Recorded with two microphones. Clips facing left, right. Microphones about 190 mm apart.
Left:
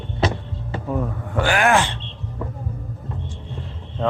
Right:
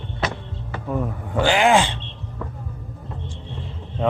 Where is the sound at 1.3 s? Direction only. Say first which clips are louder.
Right 2 dB; 20° right (ahead or behind).